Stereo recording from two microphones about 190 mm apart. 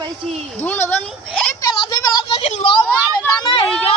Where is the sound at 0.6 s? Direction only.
10° left (ahead or behind).